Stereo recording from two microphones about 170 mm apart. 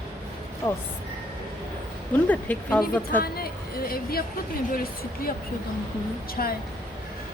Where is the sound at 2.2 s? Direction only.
10° left (ahead or behind).